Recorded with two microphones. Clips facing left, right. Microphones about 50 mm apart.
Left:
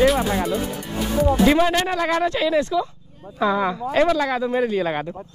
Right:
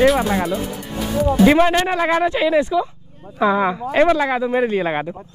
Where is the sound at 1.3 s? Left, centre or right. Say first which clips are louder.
Right 5 dB; centre.